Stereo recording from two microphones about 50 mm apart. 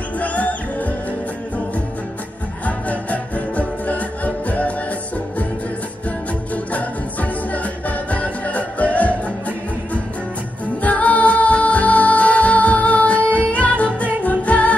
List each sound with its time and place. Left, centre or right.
0.2 s music: left
2.6 s music: left
6.0 s music: left
10.8 s music: left